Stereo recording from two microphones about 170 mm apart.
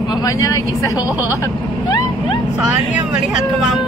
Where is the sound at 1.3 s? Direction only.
20° left (ahead or behind).